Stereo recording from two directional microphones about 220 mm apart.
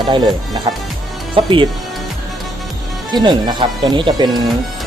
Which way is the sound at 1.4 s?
25° right (ahead or behind).